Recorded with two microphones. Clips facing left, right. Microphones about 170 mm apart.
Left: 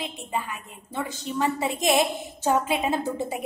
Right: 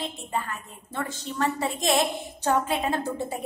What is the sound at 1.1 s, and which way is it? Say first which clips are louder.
Speech: left 2 dB; centre (ahead or behind).